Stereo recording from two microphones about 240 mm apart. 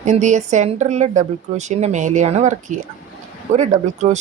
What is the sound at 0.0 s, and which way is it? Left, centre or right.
Speech, right.